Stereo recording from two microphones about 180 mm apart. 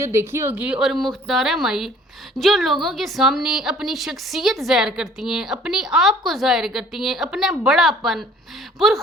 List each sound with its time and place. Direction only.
0.0 s a woman's voice: 15° right (ahead or behind)